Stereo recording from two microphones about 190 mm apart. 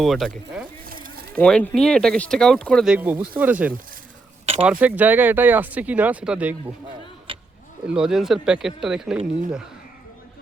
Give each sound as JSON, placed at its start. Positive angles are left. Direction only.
{"t": 0.0, "sound": "speech", "side_deg": 0}
{"t": 0.9, "sound": "a sound", "side_deg": -50}
{"t": 1.4, "sound": "speech", "side_deg": 5}
{"t": 7.3, "sound": "vehicle", "side_deg": -25}
{"t": 7.9, "sound": "speech", "side_deg": -5}